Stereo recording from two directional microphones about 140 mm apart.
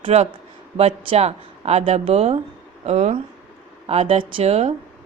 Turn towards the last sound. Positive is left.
turn(degrees=-50)  # may be behind; listen again after turning